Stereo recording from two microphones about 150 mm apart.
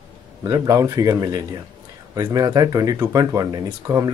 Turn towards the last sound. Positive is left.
turn(degrees=-25)  # may be behind; listen again after turning